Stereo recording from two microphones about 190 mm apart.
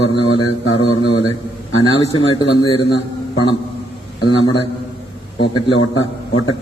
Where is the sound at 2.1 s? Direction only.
25° left (ahead or behind).